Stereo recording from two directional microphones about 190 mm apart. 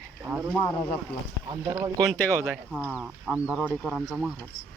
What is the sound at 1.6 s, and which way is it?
Speech, 15° right (ahead or behind).